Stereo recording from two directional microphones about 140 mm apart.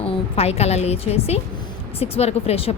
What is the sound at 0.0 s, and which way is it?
A woman's voice, 45° left (ahead or behind).